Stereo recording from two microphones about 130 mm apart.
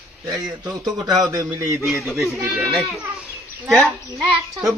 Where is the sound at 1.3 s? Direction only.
25° right (ahead or behind).